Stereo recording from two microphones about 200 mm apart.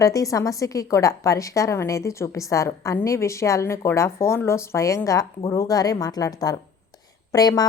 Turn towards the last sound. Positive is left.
turn(degrees=20)  # may be behind; listen again after turning